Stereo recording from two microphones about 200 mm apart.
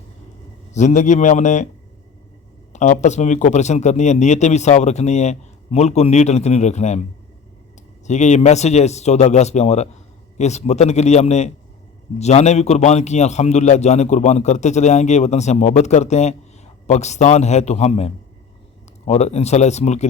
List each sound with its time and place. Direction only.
0.7 s speech: 35° left (ahead or behind)
2.7 s speech: 35° left (ahead or behind)
8.0 s speech: 35° left (ahead or behind)